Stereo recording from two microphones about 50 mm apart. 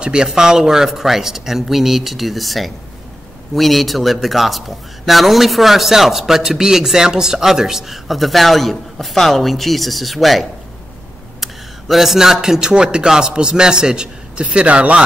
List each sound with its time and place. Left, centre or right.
0.0 s speech: centre
11.4 s speech: centre; by 15.0 s right